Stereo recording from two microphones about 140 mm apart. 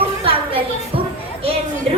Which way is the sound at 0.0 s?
40° right (ahead or behind).